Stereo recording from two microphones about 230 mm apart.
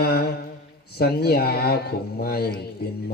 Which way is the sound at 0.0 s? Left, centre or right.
Left.